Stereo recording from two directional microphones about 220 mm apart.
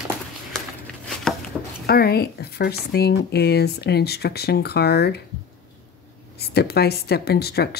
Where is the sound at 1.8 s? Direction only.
45° left (ahead or behind).